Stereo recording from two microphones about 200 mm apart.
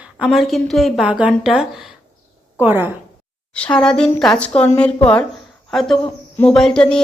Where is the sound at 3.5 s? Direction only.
5° left (ahead or behind).